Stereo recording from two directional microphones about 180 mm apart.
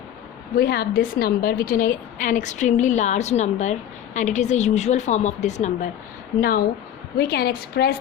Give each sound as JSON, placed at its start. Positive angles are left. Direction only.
{"t": 0.5, "sound": "a woman's voice", "side_deg": 60}
{"t": 7.2, "sound": "a woman's voice", "side_deg": 60}